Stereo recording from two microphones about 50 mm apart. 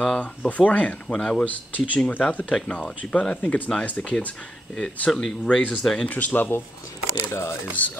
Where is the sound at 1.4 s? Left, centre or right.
Left.